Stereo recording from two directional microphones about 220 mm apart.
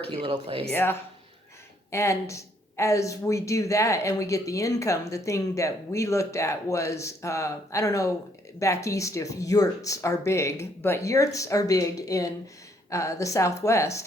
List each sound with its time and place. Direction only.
0.2 s speech: 25° right (ahead or behind)
0.7 s speech: 10° left (ahead or behind)